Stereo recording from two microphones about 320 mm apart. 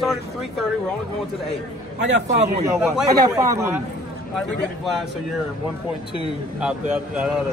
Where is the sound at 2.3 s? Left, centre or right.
Centre.